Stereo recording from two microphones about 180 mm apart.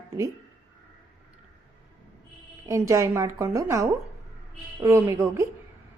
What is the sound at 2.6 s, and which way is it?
Speech, 15° right (ahead or behind).